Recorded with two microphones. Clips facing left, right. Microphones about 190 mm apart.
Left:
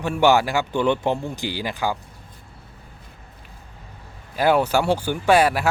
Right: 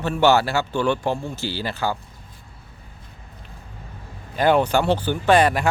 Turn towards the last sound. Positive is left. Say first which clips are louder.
# even
turn(degrees=5)  # may be behind; listen again after turning